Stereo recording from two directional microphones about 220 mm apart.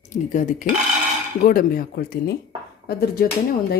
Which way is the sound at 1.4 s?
40° left (ahead or behind).